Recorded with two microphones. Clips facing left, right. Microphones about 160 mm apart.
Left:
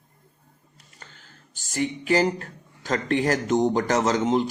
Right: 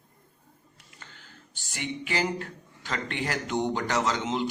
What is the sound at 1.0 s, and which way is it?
Speech, 40° left (ahead or behind).